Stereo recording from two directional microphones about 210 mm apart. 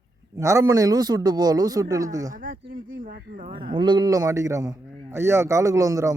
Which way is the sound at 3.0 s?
45° right (ahead or behind).